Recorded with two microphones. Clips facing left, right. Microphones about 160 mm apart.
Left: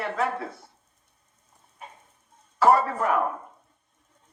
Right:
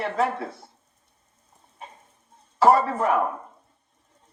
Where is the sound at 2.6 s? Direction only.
30° right (ahead or behind).